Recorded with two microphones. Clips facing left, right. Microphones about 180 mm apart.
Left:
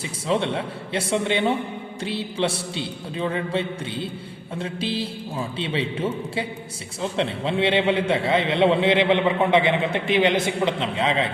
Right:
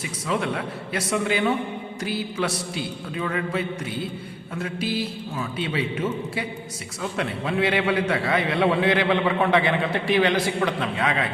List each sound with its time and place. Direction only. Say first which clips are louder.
0.0 s a man's voice: left 3 dB; 30° left (ahead or behind)